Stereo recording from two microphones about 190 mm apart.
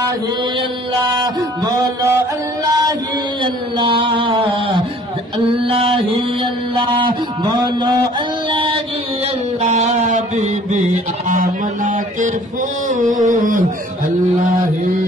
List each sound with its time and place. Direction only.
1.2 s music: 20° right (ahead or behind)
3.7 s mantra: 25° right (ahead or behind)
5.5 s a sound: 30° right (ahead or behind)
8.5 s music: 25° right (ahead or behind)
9.6 s music: 40° right (ahead or behind)
12.8 s a sound: 40° right (ahead or behind)